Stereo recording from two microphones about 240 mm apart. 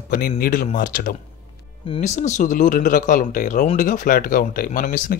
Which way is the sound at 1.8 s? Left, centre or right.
Left.